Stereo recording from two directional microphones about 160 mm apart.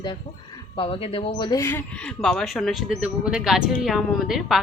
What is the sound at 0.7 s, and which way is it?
Speech, 35° left (ahead or behind).